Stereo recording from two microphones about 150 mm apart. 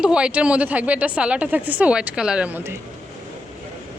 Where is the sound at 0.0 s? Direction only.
5° right (ahead or behind).